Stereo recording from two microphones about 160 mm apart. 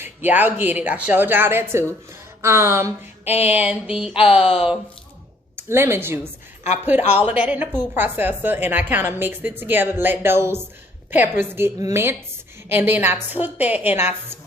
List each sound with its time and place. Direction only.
0.0 s a woman's voice: 10° right (ahead or behind)